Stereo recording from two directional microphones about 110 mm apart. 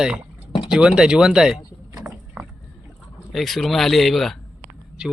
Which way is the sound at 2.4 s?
5° right (ahead or behind).